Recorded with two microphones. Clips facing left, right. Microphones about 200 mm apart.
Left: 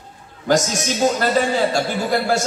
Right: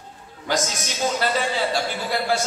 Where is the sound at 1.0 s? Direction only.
45° left (ahead or behind).